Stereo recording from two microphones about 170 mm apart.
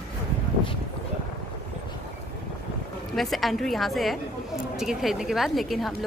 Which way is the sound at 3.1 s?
Centre (ahead or behind).